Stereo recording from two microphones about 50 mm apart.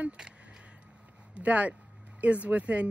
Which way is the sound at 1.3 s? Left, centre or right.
Right.